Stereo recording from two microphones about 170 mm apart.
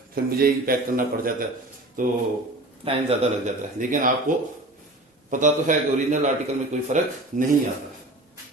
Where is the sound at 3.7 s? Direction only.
50° right (ahead or behind).